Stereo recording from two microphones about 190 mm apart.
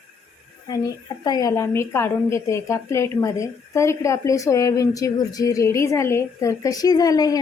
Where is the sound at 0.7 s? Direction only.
20° left (ahead or behind).